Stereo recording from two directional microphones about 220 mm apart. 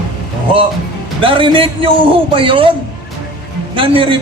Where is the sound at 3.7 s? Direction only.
25° right (ahead or behind).